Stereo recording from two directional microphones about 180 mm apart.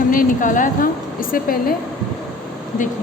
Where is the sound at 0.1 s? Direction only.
50° left (ahead or behind).